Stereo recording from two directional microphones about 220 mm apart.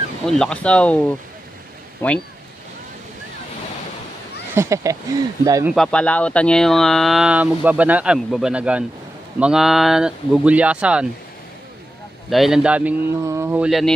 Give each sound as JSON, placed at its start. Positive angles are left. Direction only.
{"t": 0.3, "sound": "speech", "side_deg": 5}
{"t": 4.6, "sound": "speech", "side_deg": -15}
{"t": 5.8, "sound": "speech", "side_deg": 5}
{"t": 12.3, "sound": "speech", "side_deg": 0}